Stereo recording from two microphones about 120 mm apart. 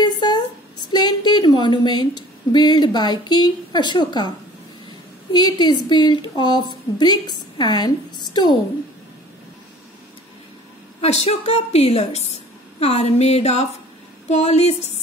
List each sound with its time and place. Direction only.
0.0 s a woman's voice: 40° left (ahead or behind)
5.3 s a woman's voice: 35° left (ahead or behind)
11.0 s a woman's voice: 60° left (ahead or behind)